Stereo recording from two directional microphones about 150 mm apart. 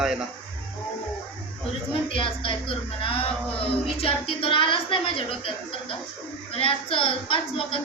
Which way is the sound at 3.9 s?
40° left (ahead or behind).